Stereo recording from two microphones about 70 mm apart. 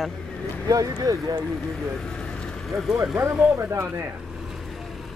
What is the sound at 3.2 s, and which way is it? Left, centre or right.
Speech, right.